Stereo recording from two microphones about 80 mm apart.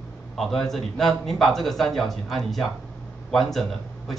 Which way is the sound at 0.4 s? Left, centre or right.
Centre.